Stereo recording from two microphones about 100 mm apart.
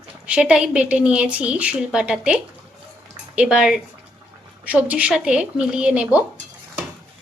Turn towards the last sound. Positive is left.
turn(degrees=-10)  # may be behind; listen again after turning